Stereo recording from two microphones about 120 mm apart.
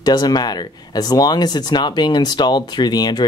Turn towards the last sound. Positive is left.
turn(degrees=35)  # may be behind; listen again after turning